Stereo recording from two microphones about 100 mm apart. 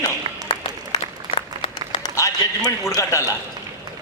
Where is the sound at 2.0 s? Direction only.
35° left (ahead or behind).